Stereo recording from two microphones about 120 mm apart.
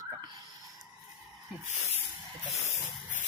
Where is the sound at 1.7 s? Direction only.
65° left (ahead or behind).